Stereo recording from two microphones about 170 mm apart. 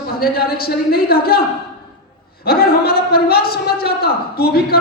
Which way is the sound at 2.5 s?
65° left (ahead or behind).